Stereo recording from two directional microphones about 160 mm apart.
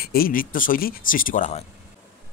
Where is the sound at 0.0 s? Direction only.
70° left (ahead or behind).